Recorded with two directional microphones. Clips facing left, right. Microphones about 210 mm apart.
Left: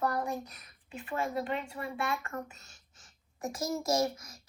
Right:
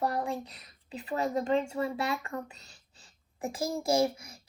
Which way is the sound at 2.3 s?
35° right (ahead or behind).